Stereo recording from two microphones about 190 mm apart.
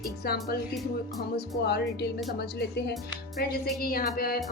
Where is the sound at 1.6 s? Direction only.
60° left (ahead or behind).